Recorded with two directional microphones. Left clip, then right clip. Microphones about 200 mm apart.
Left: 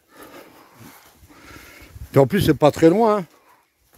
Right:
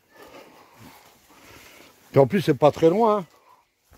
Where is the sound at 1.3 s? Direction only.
30° left (ahead or behind).